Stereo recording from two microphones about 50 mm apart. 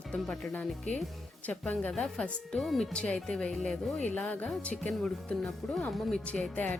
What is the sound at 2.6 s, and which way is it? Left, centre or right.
Speech, centre.